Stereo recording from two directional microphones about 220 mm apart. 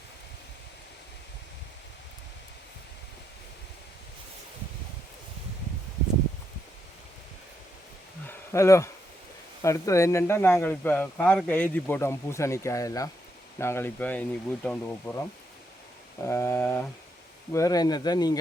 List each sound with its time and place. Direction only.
8.3 s a sound: 15° left (ahead or behind)
9.6 s speech: 15° left (ahead or behind)
16.2 s speech: 15° left (ahead or behind)